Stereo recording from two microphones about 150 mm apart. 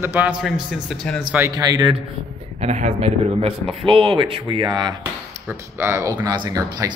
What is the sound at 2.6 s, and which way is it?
A man's voice, 45° right (ahead or behind).